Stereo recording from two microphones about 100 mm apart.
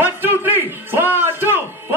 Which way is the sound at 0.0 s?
20° right (ahead or behind).